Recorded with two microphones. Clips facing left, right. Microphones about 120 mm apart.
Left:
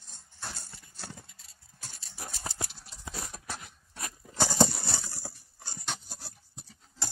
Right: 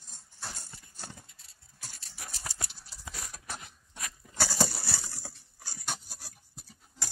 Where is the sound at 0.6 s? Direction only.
15° right (ahead or behind).